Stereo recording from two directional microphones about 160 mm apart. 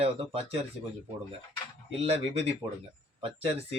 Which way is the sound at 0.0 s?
35° right (ahead or behind).